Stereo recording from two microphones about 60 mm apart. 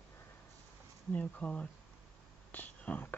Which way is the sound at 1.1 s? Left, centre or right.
Left.